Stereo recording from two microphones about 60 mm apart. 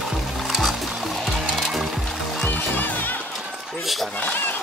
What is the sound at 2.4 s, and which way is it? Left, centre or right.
Music, left.